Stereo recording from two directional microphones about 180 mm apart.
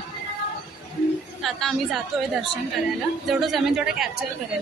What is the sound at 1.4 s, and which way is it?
Speech, centre (ahead or behind).